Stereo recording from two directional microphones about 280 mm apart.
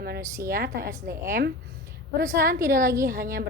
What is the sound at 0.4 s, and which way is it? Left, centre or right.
Speech, right.